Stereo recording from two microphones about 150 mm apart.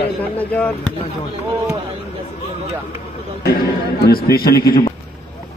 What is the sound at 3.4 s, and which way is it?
Speech, 90° left.